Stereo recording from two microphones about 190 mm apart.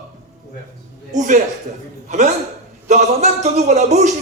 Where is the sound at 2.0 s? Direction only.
40° right (ahead or behind).